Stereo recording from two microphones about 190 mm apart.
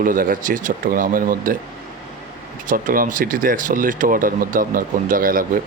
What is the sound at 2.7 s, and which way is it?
A man's voice, 45° right (ahead or behind).